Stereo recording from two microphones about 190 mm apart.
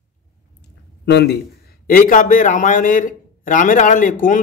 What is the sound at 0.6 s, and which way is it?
A man's voice, 60° left (ahead or behind).